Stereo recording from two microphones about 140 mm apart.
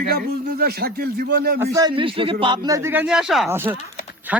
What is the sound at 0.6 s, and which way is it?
Speech, 90° right.